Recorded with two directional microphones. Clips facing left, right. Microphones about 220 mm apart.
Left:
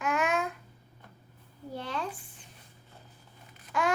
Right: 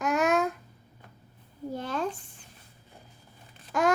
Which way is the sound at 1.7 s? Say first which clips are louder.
Right 4 dB; 45° right (ahead or behind).